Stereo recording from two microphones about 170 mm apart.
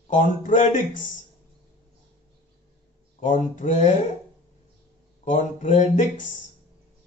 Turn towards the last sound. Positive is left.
turn(degrees=45)  # may be behind; listen again after turning